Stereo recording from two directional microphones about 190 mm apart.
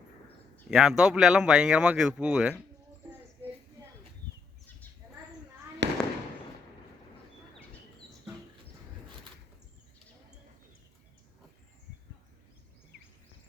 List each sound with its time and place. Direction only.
0.7 s speech: 5° right (ahead or behind)
5.8 s fireworks: 70° right (ahead or behind)